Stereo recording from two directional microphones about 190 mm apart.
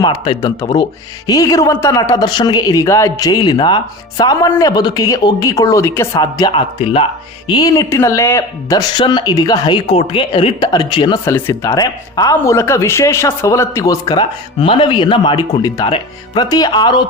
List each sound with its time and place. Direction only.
0.0 s speech: 20° left (ahead or behind)
11.3 s speech: 15° left (ahead or behind)